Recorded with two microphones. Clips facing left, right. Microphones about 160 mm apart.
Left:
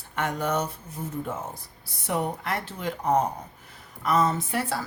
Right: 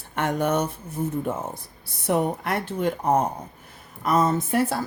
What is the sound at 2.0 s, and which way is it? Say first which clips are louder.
A woman's voice: right 5 dB; 55° right (ahead or behind).